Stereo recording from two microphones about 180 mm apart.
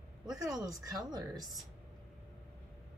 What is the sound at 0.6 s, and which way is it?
Speech, 20° right (ahead or behind).